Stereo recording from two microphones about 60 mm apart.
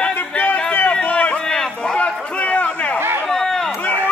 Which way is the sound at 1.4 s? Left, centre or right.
Centre.